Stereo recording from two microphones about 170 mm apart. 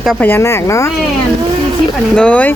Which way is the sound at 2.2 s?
10° left (ahead or behind).